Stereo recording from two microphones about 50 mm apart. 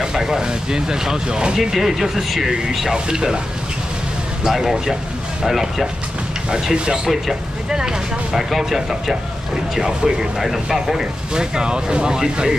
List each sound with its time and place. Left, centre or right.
0.0 s speech: centre
4.5 s speech: centre